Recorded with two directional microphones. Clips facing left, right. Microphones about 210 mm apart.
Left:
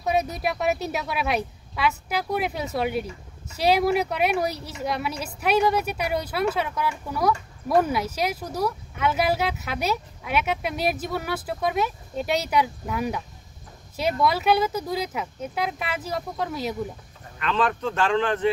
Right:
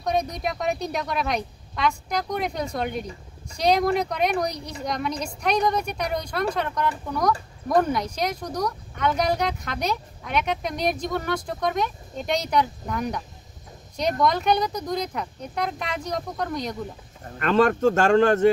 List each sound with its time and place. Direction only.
0.0 s speech: 5° left (ahead or behind)
17.4 s a man's voice: 45° right (ahead or behind)